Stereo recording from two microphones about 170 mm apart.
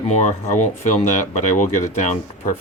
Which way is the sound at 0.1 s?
45° left (ahead or behind).